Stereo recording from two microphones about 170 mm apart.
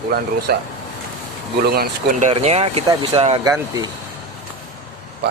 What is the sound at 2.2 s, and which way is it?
Speech, 40° right (ahead or behind).